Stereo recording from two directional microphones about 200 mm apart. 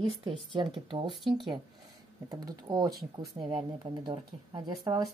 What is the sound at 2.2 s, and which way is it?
Speech, 20° right (ahead or behind).